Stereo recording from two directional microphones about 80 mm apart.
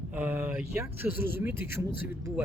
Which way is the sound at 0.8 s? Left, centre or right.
Right.